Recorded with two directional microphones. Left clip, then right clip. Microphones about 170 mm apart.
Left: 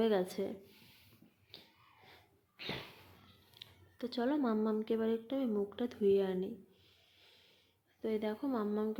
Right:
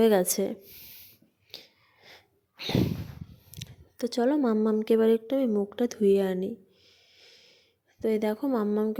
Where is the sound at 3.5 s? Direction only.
45° right (ahead or behind).